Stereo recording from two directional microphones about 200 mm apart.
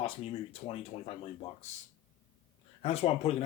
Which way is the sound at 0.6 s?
30° left (ahead or behind).